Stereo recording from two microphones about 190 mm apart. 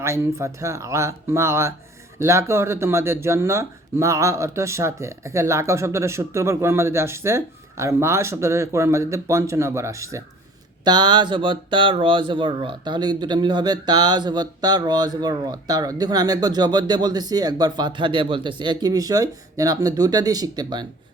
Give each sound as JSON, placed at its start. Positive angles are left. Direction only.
{"t": 0.0, "sound": "speech", "side_deg": -15}